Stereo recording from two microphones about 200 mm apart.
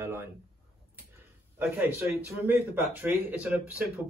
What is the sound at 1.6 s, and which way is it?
Speech, 10° right (ahead or behind).